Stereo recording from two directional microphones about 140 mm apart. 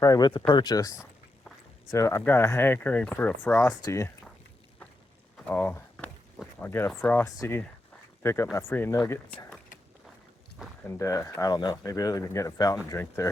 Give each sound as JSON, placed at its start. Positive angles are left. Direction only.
{"t": 0.0, "sound": "speech", "side_deg": 25}
{"t": 5.5, "sound": "speech", "side_deg": 10}
{"t": 10.8, "sound": "speech", "side_deg": 20}